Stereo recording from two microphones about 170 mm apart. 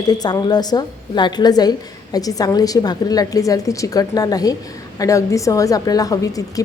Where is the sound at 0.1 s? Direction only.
25° left (ahead or behind).